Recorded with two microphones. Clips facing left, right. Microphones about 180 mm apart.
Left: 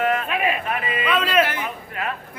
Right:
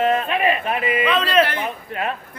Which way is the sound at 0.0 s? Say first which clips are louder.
Right 3 dB; 25° right (ahead or behind).